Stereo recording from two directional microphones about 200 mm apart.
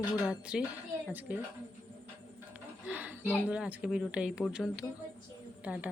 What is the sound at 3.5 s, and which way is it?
Speech, 5° right (ahead or behind).